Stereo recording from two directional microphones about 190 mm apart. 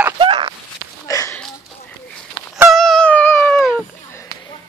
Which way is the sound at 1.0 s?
15° left (ahead or behind).